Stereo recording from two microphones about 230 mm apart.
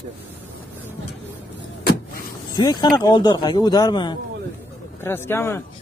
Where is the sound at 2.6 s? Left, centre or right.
Centre.